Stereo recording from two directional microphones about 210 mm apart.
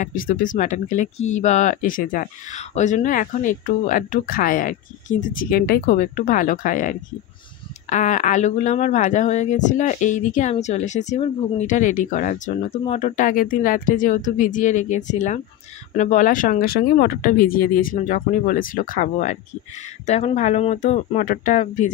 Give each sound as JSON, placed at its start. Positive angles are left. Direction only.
{"t": 0.0, "sound": "speech", "side_deg": 40}